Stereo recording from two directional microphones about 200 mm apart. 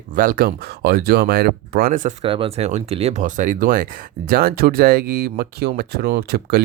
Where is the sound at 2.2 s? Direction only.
25° right (ahead or behind).